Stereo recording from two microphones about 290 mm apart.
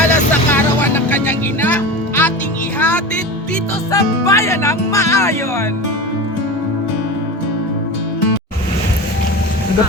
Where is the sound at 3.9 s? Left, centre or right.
Centre.